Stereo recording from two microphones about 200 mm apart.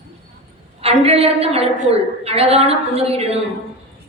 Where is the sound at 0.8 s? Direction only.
30° right (ahead or behind).